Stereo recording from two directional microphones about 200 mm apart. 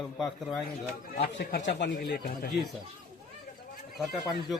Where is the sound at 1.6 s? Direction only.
60° left (ahead or behind).